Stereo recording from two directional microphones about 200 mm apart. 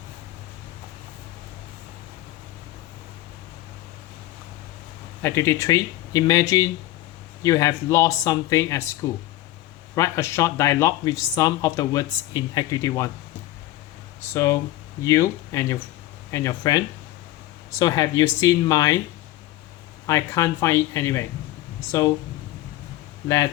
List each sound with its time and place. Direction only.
5.2 s speech: 15° left (ahead or behind)
14.3 s speech: 15° left (ahead or behind)
20.1 s speech: 15° left (ahead or behind)